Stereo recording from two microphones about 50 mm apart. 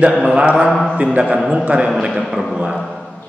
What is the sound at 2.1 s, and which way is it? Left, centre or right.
Speech, centre.